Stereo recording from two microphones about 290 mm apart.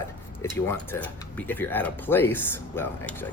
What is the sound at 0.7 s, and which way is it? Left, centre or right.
Speech, centre.